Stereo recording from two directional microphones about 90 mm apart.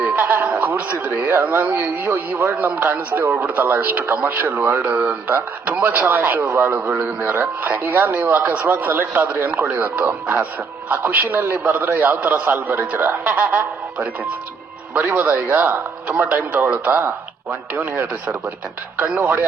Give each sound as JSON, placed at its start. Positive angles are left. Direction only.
{"t": 0.2, "sound": "music", "side_deg": -20}
{"t": 1.3, "sound": "a man's voice", "side_deg": -20}